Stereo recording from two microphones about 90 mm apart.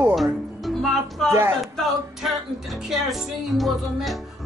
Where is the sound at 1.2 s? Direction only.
5° left (ahead or behind).